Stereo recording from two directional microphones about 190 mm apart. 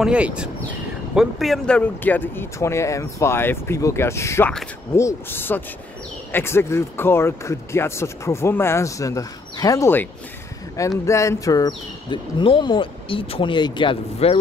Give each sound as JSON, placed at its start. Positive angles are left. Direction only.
{"t": 0.0, "sound": "speech", "side_deg": -5}
{"t": 11.1, "sound": "speech", "side_deg": 15}